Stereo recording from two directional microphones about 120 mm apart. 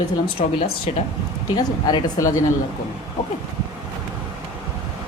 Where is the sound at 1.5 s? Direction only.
35° left (ahead or behind).